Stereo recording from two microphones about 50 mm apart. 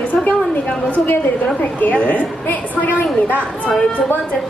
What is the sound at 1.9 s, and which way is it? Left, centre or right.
A woman's voice, left.